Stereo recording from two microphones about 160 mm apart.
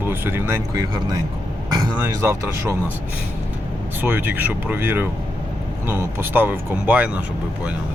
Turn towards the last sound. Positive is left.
turn(degrees=-10)  # may be behind; listen again after turning